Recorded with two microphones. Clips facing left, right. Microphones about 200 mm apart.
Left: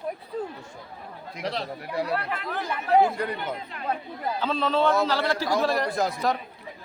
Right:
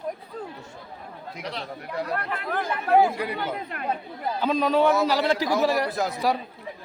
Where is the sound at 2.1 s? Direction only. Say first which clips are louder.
Right 1 dB; 50° right (ahead or behind).